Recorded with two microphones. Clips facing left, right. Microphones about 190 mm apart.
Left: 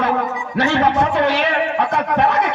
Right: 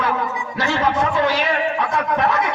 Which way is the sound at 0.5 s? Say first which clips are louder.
Left 4 dB; 65° left (ahead or behind).